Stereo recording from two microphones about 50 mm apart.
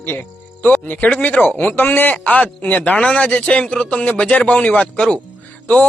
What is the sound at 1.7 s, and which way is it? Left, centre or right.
A man's voice, left.